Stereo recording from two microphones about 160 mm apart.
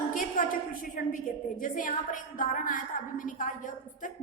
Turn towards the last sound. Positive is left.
turn(degrees=55)  # may be behind; listen again after turning